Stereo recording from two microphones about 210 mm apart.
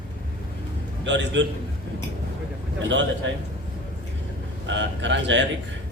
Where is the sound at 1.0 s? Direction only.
60° right (ahead or behind).